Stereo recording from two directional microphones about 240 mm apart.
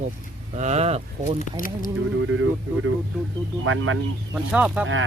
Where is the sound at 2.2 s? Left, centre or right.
Right.